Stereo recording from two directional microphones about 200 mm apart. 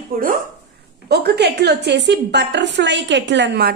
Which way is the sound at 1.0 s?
55° right (ahead or behind).